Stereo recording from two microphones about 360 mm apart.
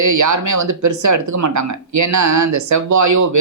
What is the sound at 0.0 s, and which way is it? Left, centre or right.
Speech, right.